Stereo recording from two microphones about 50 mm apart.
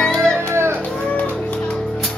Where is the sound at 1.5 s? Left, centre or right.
Centre.